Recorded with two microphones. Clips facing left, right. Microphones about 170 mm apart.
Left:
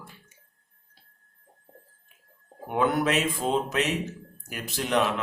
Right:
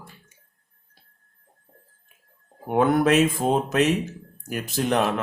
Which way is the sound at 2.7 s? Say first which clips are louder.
Right 5 dB; 45° right (ahead or behind).